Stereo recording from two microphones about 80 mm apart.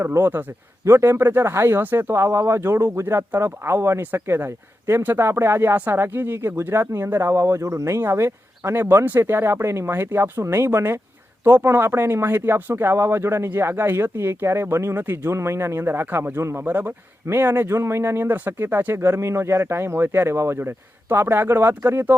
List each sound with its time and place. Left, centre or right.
0.0 s speech: right